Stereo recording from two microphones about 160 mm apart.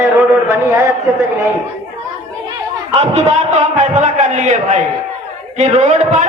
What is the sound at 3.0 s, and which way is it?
A man's voice, 45° right (ahead or behind).